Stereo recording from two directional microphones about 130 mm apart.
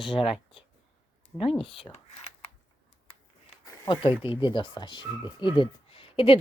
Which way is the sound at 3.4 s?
40° left (ahead or behind).